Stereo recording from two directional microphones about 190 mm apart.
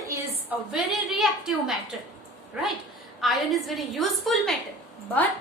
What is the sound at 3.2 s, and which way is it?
A woman's voice, centre (ahead or behind).